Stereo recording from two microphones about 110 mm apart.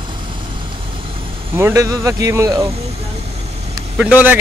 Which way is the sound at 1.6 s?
25° right (ahead or behind).